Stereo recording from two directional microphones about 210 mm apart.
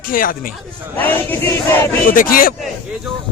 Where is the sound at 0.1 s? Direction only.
40° left (ahead or behind).